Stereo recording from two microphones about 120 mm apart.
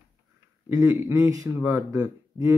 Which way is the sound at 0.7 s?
25° right (ahead or behind).